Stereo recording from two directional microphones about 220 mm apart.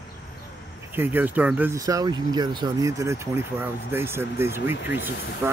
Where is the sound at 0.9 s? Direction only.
10° right (ahead or behind).